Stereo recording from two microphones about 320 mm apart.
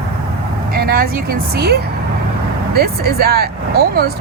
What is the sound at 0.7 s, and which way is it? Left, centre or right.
Vehicle, right.